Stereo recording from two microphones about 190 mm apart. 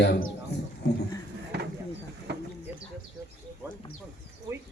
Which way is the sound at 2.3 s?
60° right (ahead or behind).